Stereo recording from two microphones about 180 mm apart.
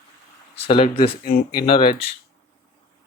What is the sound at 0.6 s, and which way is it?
Speech, 30° left (ahead or behind).